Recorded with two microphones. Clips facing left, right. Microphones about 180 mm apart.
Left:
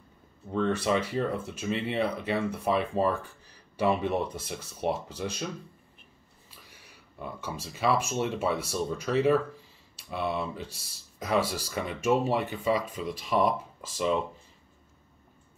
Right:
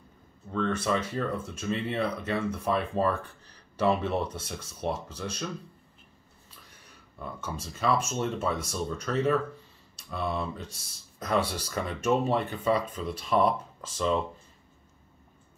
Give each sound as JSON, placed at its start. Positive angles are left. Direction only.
{"t": 0.5, "sound": "speech", "side_deg": 20}
{"t": 0.8, "sound": "speech", "side_deg": 10}
{"t": 6.7, "sound": "speech", "side_deg": 5}